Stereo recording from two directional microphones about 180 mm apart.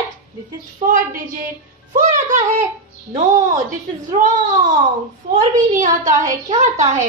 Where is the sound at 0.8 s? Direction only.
35° right (ahead or behind).